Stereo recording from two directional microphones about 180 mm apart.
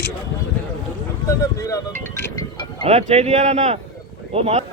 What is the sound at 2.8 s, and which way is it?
Speech, 35° right (ahead or behind).